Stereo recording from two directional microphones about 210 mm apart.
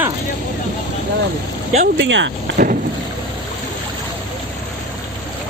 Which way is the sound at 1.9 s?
60° right (ahead or behind).